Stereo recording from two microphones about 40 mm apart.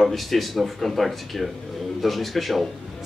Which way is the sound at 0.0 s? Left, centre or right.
Centre.